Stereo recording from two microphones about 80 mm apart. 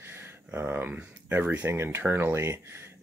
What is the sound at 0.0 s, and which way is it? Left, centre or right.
Speech, right.